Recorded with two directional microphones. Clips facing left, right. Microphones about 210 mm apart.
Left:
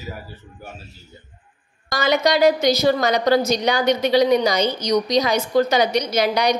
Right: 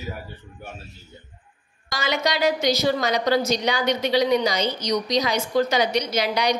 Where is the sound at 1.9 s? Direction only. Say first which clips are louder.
Left 6 dB; 50° left (ahead or behind).